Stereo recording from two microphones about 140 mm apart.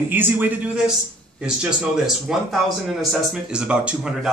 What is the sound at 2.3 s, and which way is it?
Speech, centre (ahead or behind).